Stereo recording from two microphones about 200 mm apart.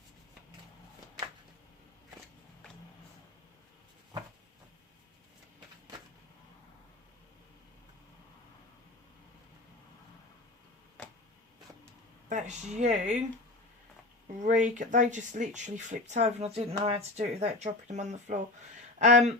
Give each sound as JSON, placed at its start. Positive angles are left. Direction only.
{"t": 12.3, "sound": "speech", "side_deg": -35}
{"t": 14.4, "sound": "speech", "side_deg": -40}